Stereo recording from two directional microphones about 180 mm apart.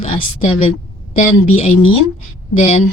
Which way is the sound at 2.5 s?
35° left (ahead or behind).